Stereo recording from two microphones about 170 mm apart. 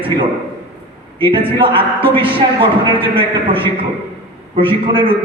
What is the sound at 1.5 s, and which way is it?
A man's voice, 30° right (ahead or behind).